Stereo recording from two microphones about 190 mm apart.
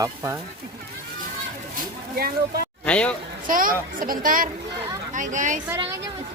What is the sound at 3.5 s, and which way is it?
Speech, 45° right (ahead or behind).